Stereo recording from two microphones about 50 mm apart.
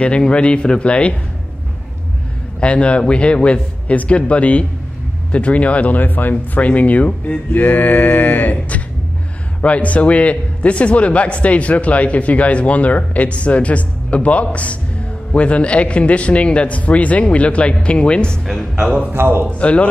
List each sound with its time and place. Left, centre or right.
0.0 s a man's voice: left
2.6 s a man's voice: left
6.3 s a man's voice: left
18.8 s a man's voice: centre
19.1 s a man's voice: right
19.6 s a man's voice: left